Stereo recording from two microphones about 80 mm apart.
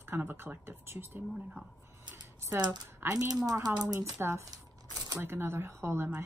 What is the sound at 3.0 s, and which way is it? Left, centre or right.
Speech, right.